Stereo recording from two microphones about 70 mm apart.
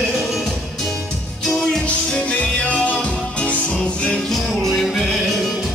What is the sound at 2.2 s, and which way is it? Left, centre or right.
Music, centre.